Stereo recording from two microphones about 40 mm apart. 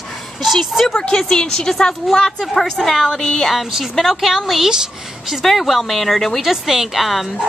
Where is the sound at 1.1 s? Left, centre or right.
Centre.